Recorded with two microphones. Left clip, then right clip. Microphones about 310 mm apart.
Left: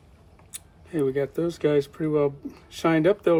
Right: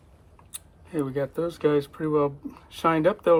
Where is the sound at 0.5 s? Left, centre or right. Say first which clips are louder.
Left 1 dB; centre.